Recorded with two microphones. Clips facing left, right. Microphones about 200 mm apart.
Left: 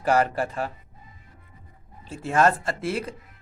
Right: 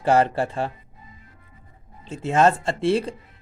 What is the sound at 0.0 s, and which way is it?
Speech, 25° right (ahead or behind).